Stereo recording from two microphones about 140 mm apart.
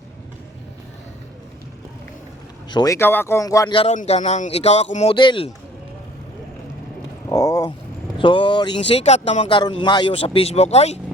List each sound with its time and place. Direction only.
2.6 s speech: 30° left (ahead or behind)
3.9 s speech: 55° left (ahead or behind)
5.1 s speech: 35° left (ahead or behind)
7.3 s a sound: 25° left (ahead or behind)
8.2 s speech: 35° left (ahead or behind)
9.6 s speech: 35° left (ahead or behind); by 11.0 s 50° left (ahead or behind)